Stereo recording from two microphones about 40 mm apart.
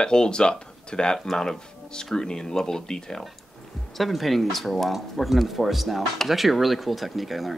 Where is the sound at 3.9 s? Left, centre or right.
Centre.